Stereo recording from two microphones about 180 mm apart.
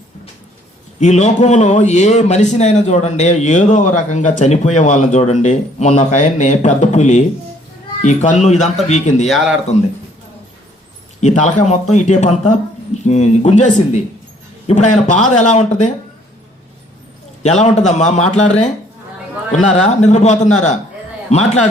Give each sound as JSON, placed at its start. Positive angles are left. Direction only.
{"t": 0.9, "sound": "a man's voice", "side_deg": 40}
{"t": 9.2, "sound": "speech", "side_deg": 0}
{"t": 11.2, "sound": "a man's voice", "side_deg": 40}
{"t": 17.6, "sound": "a man's voice", "side_deg": 40}